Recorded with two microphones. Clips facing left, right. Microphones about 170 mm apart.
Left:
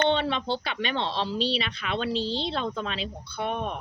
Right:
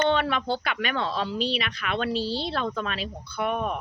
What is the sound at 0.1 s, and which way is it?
Speech, 25° left (ahead or behind).